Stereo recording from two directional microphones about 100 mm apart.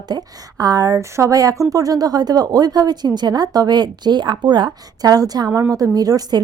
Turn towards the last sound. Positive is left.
turn(degrees=-40)  # may be behind; listen again after turning